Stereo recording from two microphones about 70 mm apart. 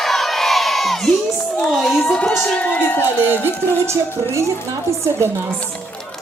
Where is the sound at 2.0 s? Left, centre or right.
Centre.